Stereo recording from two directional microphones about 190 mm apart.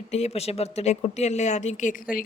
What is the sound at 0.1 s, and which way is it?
A woman's voice, 35° left (ahead or behind).